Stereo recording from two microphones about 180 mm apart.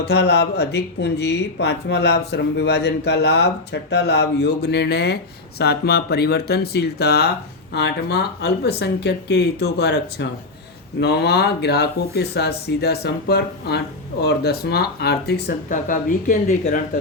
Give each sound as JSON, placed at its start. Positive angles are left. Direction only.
{"t": 0.0, "sound": "speech", "side_deg": 65}
{"t": 15.7, "sound": "speech", "side_deg": 45}